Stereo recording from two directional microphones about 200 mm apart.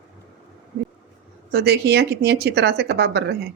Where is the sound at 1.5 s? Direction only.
55° right (ahead or behind).